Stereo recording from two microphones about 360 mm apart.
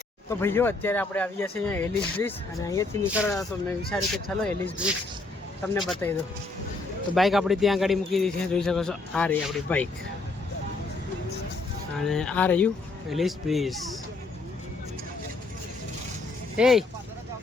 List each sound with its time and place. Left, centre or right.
0.3 s speech: centre
3.1 s speech: centre
7.2 s speech: centre
12.0 s speech: centre
16.6 s speech: centre